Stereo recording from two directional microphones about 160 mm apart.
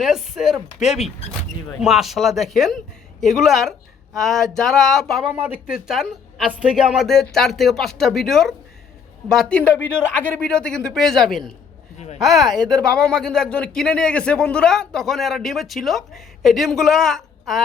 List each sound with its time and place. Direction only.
0.0 s speech: centre (ahead or behind)
12.5 s speech: 25° right (ahead or behind)
13.0 s speech: 5° left (ahead or behind)